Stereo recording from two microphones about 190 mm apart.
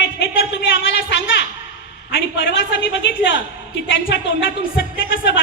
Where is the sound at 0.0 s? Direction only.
65° left (ahead or behind).